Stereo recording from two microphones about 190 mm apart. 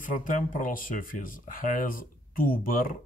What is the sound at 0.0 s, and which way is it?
Speech, 45° left (ahead or behind).